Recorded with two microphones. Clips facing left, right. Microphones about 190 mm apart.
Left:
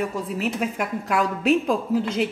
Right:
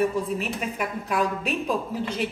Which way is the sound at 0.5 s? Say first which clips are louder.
Left 4 dB; 75° left (ahead or behind).